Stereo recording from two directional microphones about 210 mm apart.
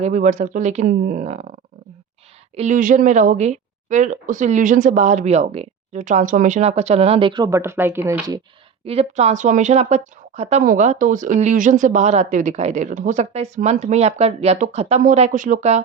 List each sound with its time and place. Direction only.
0.0 s a woman's voice: 35° right (ahead or behind)
2.6 s a woman's voice: 35° right (ahead or behind); by 8.4 s 10° right (ahead or behind)
8.8 s a woman's voice: 30° right (ahead or behind)